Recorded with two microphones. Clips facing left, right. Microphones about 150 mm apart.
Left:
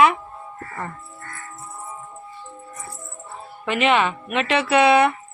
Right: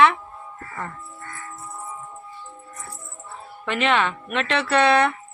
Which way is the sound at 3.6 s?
5° left (ahead or behind).